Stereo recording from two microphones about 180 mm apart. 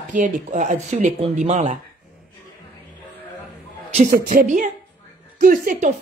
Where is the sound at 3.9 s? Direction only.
45° right (ahead or behind).